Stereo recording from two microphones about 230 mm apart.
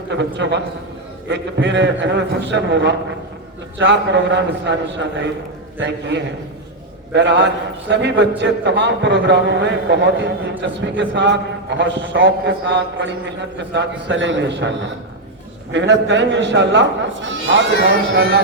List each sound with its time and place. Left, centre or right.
0.1 s a man's voice: right
15.7 s a man's voice: right